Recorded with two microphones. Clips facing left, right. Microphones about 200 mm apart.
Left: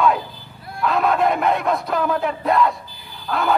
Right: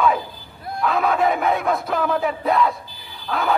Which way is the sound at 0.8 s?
Centre (ahead or behind).